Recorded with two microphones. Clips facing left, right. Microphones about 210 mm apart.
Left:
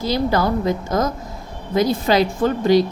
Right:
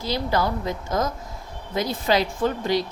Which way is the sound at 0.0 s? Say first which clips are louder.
Left 5 dB; 45° left (ahead or behind).